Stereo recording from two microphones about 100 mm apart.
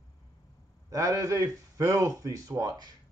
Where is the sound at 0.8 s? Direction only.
35° right (ahead or behind).